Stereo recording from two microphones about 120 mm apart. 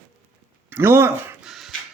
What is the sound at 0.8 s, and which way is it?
Speech, 20° right (ahead or behind).